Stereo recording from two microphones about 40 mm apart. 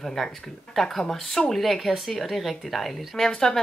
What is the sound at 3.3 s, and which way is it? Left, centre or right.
Speech, centre.